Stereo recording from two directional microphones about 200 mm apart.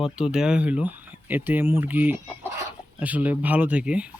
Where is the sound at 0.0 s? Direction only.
5° right (ahead or behind).